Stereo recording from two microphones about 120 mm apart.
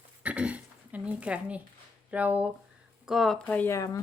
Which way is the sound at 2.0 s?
10° right (ahead or behind).